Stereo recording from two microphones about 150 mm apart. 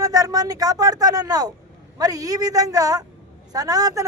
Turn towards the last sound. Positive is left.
turn(degrees=-25)  # may be behind; listen again after turning